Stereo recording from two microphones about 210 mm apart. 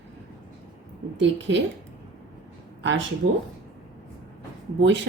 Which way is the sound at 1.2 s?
60° right (ahead or behind).